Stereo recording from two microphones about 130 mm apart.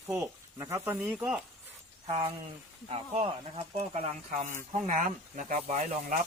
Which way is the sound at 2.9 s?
50° right (ahead or behind).